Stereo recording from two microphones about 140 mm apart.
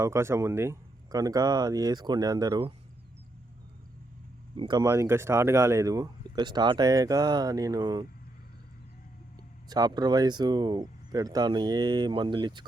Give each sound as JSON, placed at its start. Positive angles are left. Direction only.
{"t": 0.0, "sound": "speech", "side_deg": -20}
{"t": 4.5, "sound": "speech", "side_deg": -30}
{"t": 9.6, "sound": "speech", "side_deg": -30}